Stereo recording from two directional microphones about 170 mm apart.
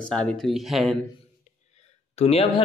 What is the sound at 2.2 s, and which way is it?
Speech, 35° left (ahead or behind).